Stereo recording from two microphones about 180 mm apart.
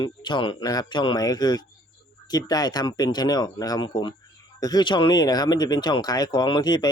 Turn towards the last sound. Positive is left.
turn(degrees=25)  # may be behind; listen again after turning